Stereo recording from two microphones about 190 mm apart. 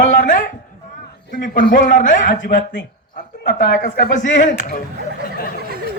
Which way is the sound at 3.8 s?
45° left (ahead or behind).